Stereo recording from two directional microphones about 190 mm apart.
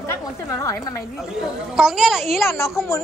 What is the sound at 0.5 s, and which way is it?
Speech, 15° left (ahead or behind).